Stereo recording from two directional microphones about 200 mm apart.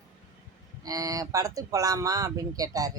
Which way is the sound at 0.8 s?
20° right (ahead or behind).